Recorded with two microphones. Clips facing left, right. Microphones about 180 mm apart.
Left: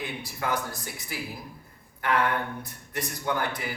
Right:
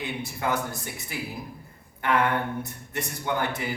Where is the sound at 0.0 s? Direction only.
25° right (ahead or behind).